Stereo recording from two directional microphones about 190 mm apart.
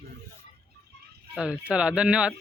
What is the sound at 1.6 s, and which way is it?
Speech, 5° right (ahead or behind).